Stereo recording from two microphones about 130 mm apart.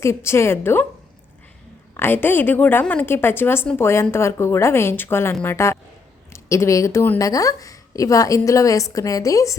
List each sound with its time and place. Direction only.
0.0 s a woman's voice: 20° left (ahead or behind)
2.0 s a woman's voice: 15° left (ahead or behind)